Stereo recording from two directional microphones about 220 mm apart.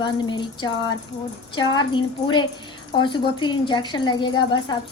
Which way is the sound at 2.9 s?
20° left (ahead or behind).